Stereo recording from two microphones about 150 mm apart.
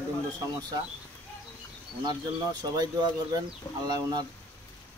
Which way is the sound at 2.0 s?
30° right (ahead or behind).